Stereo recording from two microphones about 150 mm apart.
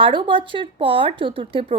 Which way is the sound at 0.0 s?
35° right (ahead or behind).